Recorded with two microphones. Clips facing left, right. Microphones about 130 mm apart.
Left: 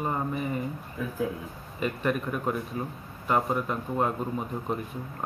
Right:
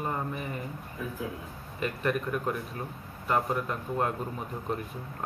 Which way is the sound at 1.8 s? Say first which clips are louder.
Left 2 dB; centre (ahead or behind).